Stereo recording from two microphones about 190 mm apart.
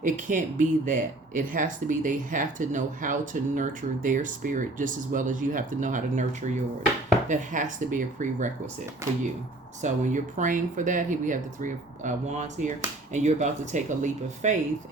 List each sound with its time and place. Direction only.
0.0 s speech: 45° right (ahead or behind)
9.8 s speech: 40° right (ahead or behind)